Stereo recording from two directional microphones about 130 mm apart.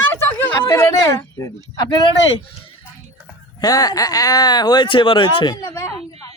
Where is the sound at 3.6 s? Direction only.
30° left (ahead or behind).